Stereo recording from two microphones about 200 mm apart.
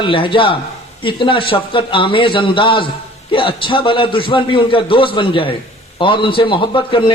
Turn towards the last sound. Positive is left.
turn(degrees=25)  # may be behind; listen again after turning